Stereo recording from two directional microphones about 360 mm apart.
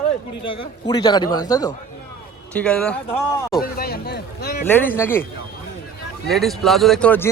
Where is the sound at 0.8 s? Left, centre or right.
Centre.